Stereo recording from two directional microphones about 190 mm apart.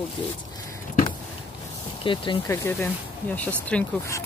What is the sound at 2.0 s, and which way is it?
Speech, 25° left (ahead or behind).